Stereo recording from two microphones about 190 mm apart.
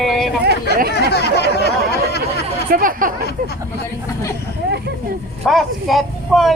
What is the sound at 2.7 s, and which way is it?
Speech, 45° right (ahead or behind).